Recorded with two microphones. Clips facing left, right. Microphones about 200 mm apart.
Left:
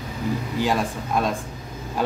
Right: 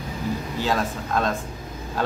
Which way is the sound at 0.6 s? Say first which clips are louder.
Left 1 dB; 15° left (ahead or behind).